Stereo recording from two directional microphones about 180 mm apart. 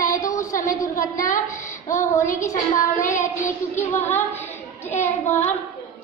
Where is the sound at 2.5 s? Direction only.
45° left (ahead or behind).